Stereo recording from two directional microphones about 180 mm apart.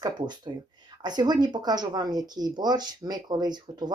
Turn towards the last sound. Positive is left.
turn(degrees=-25)  # may be behind; listen again after turning